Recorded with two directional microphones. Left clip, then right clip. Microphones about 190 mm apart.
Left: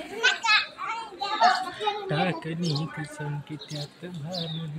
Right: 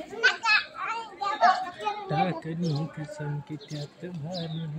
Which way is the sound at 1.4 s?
Centre (ahead or behind).